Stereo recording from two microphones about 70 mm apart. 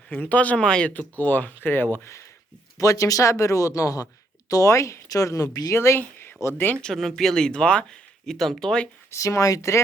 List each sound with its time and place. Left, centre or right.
0.1 s speech: left
2.7 s speech: left
5.0 s speech: left
5.7 s speech: left
6.8 s speech: centre
8.3 s speech: centre
9.0 s speech: left